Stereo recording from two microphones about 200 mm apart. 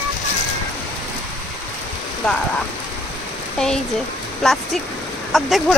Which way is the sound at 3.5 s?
5° left (ahead or behind).